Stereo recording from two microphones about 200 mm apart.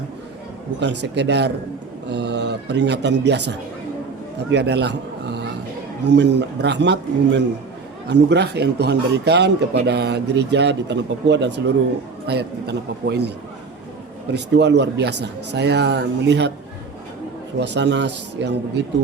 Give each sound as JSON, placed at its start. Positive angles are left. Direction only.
{"t": 0.8, "sound": "speech", "side_deg": -60}
{"t": 4.5, "sound": "speech", "side_deg": -55}
{"t": 14.3, "sound": "speech", "side_deg": -60}
{"t": 17.6, "sound": "speech", "side_deg": -60}